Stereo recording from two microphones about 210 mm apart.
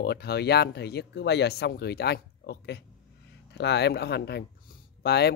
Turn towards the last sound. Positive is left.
turn(degrees=50)  # may be behind; listen again after turning